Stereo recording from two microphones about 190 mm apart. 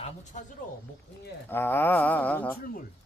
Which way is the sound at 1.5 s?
10° left (ahead or behind).